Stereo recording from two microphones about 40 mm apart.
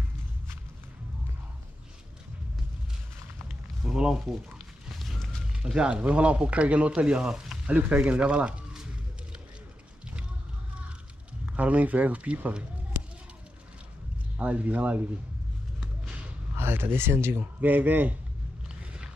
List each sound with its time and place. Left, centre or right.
3.8 s speech: centre
4.8 s a sound: centre
5.9 s speech: right
11.5 s speech: right
14.4 s speech: right
16.5 s speech: right
17.6 s a man's voice: right